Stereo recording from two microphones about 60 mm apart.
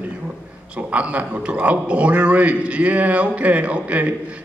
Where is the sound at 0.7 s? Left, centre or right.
Right.